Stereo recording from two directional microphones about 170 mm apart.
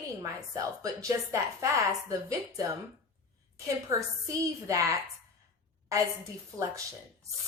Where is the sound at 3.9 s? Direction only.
20° right (ahead or behind).